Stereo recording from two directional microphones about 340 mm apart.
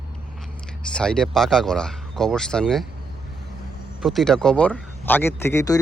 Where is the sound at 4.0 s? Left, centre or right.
Centre.